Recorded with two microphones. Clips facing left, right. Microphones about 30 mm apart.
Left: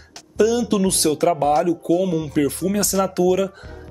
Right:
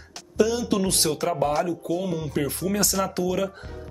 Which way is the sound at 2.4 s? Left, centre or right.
Centre.